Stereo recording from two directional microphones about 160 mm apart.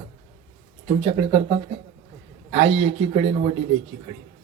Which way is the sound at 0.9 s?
40° right (ahead or behind).